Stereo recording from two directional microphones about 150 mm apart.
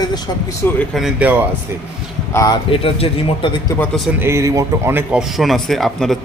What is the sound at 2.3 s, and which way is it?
Speech, 20° left (ahead or behind).